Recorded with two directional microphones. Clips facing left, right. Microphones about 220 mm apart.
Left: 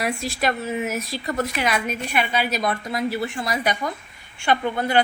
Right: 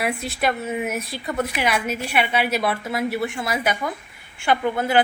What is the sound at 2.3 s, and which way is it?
Speech, 65° right (ahead or behind).